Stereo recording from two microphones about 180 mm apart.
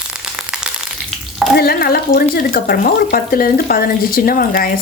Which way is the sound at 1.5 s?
60° left (ahead or behind).